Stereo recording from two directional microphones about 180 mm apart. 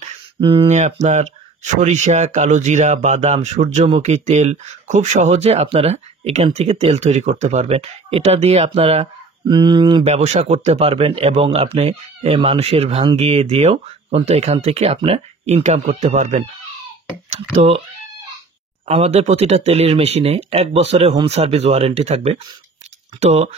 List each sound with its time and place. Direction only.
0.0 s a sound: 30° right (ahead or behind)
1.0 s speech: 40° right (ahead or behind)
18.9 s speech: 35° right (ahead or behind)